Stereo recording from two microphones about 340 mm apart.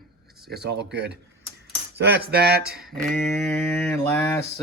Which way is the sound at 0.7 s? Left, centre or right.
Right.